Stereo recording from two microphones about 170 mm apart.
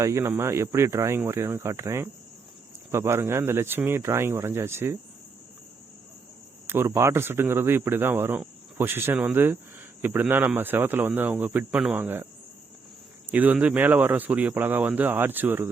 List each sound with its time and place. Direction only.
0.0 s speech: 15° right (ahead or behind)
6.7 s speech: 15° right (ahead or behind)